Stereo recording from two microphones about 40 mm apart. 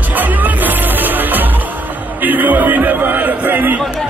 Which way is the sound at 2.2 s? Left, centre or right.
Right.